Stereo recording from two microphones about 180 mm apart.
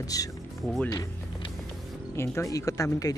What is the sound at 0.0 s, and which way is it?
Speech, 20° left (ahead or behind).